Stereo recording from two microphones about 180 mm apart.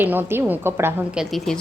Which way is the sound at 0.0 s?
10° right (ahead or behind).